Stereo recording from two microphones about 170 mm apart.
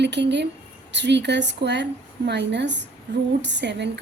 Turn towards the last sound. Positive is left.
turn(degrees=-90)